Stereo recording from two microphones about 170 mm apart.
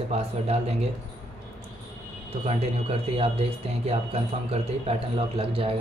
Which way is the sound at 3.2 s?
35° right (ahead or behind).